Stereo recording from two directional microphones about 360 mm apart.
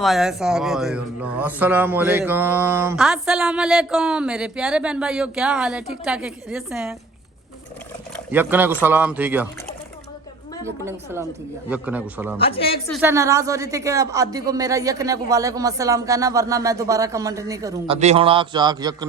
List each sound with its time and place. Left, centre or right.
0.0 s speech: centre
8.1 s speech: centre
10.6 s speech: centre
12.4 s speech: centre
12.9 s speech: centre